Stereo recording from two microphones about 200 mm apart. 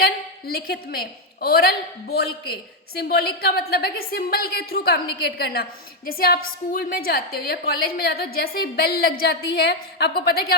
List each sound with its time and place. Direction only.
0.0 s a woman's voice: 50° left (ahead or behind)